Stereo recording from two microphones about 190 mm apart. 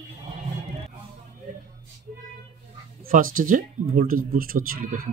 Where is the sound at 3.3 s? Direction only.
45° right (ahead or behind).